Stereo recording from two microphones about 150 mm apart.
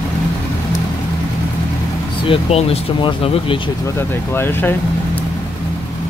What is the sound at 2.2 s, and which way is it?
Speech, 35° left (ahead or behind).